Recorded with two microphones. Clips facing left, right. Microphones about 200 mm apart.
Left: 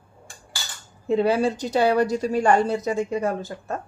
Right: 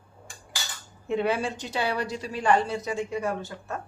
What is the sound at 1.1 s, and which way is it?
A woman's voice, 35° left (ahead or behind).